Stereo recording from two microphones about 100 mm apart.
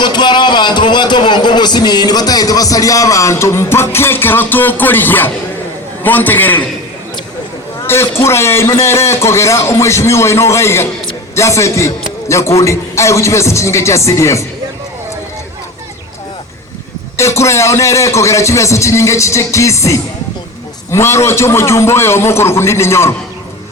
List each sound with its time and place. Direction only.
0.0 s a man's voice: 50° left (ahead or behind); by 6.7 s 20° left (ahead or behind)
7.9 s a man's voice: 25° left (ahead or behind)
17.2 s a man's voice: 30° left (ahead or behind)